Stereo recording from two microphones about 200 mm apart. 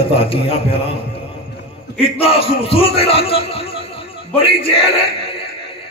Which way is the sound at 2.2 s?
30° left (ahead or behind).